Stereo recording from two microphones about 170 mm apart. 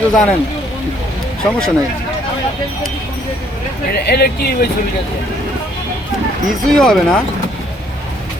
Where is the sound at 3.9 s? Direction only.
70° left (ahead or behind).